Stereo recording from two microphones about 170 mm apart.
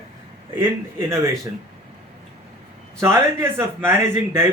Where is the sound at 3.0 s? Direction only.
15° right (ahead or behind).